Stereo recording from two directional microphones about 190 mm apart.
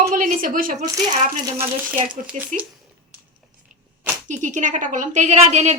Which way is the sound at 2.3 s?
40° right (ahead or behind).